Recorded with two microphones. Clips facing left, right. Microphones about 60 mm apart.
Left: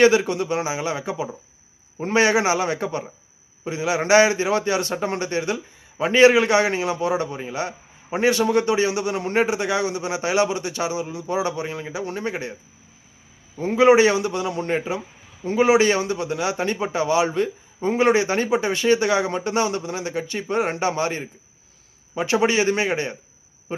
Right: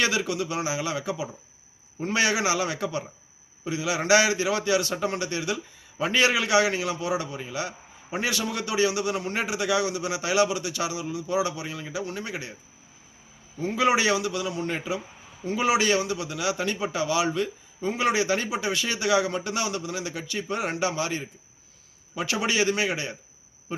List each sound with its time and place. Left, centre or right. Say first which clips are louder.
0.0 s a man's voice: left 9 dB; left
13.6 s a man's voice: left 8 dB; left